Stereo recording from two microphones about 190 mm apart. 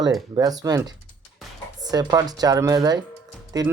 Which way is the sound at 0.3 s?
20° right (ahead or behind).